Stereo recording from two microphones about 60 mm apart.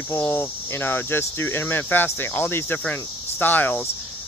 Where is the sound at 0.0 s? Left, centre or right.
Left.